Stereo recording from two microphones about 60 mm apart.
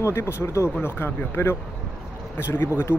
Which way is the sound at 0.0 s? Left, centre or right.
Left.